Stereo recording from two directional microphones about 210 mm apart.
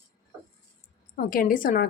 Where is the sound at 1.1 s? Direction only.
40° left (ahead or behind).